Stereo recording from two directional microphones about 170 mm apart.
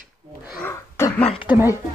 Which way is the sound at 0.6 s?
15° left (ahead or behind).